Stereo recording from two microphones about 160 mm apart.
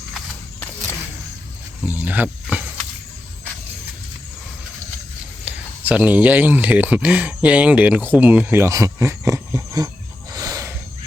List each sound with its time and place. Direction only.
1.9 s speech: 10° right (ahead or behind)
5.5 s speech: 10° right (ahead or behind)
10.3 s a sound: 20° right (ahead or behind)